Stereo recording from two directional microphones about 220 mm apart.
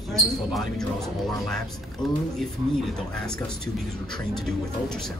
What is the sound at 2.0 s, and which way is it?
Speech, 20° left (ahead or behind).